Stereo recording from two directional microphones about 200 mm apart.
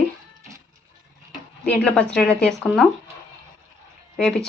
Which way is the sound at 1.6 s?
5° left (ahead or behind).